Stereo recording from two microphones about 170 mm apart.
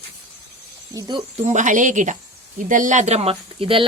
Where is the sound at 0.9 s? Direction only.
20° right (ahead or behind).